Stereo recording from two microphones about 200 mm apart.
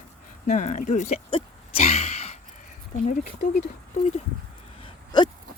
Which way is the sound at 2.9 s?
45° left (ahead or behind).